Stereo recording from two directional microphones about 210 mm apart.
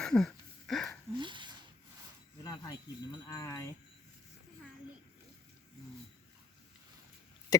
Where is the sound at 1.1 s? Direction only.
20° right (ahead or behind).